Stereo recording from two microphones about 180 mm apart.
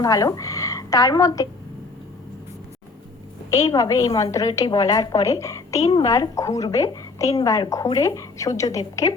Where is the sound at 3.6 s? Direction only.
20° left (ahead or behind).